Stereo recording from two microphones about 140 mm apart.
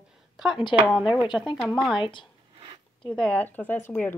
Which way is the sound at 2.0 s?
35° left (ahead or behind).